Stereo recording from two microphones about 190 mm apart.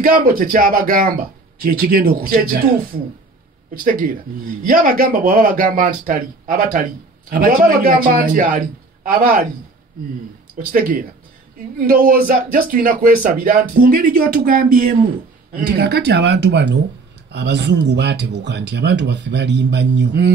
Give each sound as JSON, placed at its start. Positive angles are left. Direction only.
{"t": 0.0, "sound": "speech", "side_deg": -50}
{"t": 10.7, "sound": "speech", "side_deg": -50}
{"t": 15.5, "sound": "speech", "side_deg": -60}